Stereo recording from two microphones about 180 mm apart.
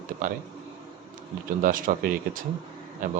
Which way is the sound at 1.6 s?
50° right (ahead or behind).